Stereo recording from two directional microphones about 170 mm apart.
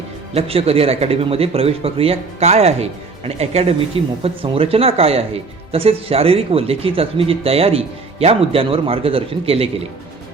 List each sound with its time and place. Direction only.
0.3 s speech: 35° right (ahead or behind)